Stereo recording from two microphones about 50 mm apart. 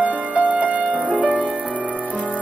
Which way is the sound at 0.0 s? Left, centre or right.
Right.